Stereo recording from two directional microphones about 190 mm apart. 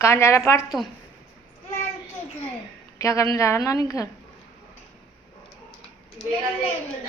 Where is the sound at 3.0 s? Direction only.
15° left (ahead or behind).